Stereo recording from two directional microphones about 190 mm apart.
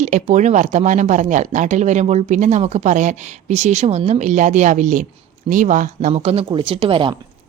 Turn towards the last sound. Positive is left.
turn(degrees=-25)  # may be behind; listen again after turning